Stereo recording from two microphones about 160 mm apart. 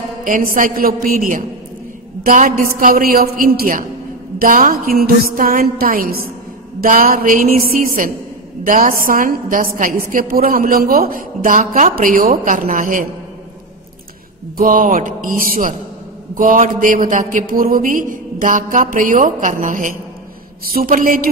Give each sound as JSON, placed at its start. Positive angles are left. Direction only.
{"t": 0.2, "sound": "a woman's voice", "side_deg": -60}
{"t": 14.6, "sound": "speech", "side_deg": -60}
{"t": 20.6, "sound": "speech", "side_deg": -65}